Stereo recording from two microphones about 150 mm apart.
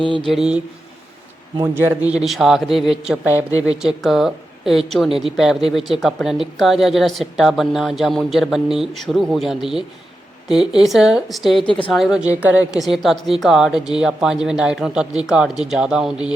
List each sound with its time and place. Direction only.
0.3 s a man's voice: 5° right (ahead or behind)
1.5 s a man's voice: 20° right (ahead or behind)
2.2 s a man's voice: centre (ahead or behind)